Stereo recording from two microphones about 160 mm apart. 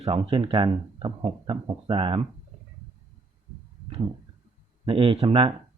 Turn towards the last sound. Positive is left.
turn(degrees=-35)  # may be behind; listen again after turning